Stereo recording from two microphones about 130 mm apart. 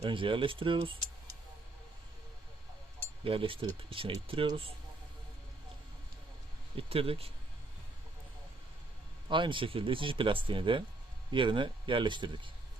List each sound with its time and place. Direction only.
0.0 s speech: 40° right (ahead or behind)
3.0 s speech: 45° right (ahead or behind)
6.7 s speech: 45° right (ahead or behind)
9.3 s speech: 40° right (ahead or behind)